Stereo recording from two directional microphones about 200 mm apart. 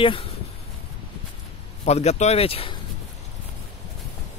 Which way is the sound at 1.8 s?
35° left (ahead or behind).